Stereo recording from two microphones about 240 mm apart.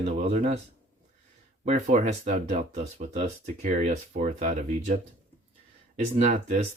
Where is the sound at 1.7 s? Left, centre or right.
Right.